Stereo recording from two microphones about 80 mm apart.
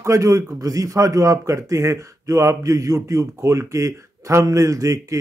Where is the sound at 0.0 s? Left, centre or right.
Right.